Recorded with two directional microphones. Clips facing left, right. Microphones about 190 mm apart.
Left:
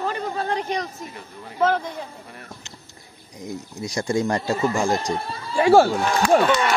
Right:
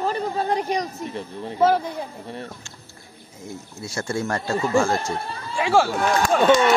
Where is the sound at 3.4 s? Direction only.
15° left (ahead or behind).